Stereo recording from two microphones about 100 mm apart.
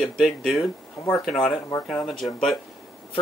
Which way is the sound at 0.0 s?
Centre (ahead or behind).